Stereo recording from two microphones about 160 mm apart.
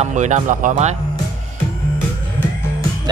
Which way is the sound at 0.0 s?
50° right (ahead or behind).